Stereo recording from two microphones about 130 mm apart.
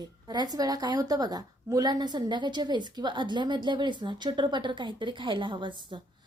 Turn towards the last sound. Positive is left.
turn(degrees=-40)  # may be behind; listen again after turning